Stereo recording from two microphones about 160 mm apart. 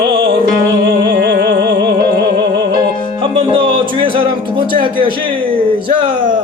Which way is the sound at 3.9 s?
35° right (ahead or behind).